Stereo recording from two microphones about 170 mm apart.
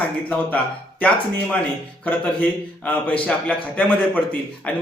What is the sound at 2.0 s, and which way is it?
Speech, 10° left (ahead or behind).